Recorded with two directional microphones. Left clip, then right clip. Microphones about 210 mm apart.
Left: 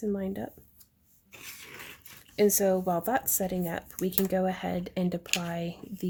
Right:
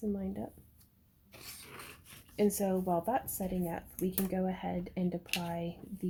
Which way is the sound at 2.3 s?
40° left (ahead or behind).